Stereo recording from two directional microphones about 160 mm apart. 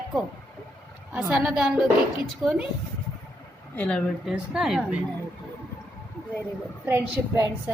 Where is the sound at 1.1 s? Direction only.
5° right (ahead or behind).